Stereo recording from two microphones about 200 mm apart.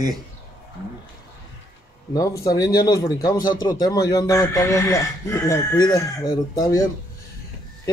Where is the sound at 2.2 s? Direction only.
15° left (ahead or behind).